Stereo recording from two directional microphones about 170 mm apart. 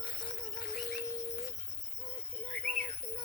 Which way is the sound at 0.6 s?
90° left.